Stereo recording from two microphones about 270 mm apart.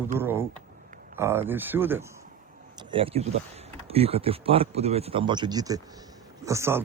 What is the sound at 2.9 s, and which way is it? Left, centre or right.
Speech, right.